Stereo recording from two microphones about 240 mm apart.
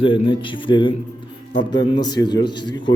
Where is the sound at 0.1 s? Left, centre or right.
Left.